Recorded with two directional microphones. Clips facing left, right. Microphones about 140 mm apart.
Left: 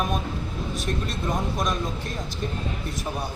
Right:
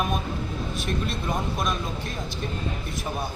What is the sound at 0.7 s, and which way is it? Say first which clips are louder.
Speech: even; 40° left (ahead or behind).